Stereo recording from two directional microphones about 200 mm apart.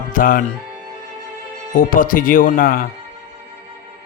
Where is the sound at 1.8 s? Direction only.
45° left (ahead or behind).